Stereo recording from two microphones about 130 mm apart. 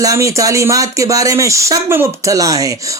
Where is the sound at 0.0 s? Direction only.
25° right (ahead or behind).